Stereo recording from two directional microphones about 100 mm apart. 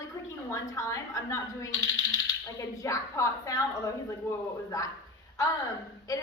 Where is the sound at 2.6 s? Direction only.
35° left (ahead or behind).